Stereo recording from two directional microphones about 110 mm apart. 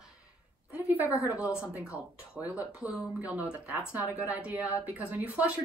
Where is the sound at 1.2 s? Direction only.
15° right (ahead or behind).